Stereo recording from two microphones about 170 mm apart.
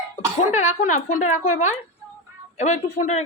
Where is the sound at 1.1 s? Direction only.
45° left (ahead or behind).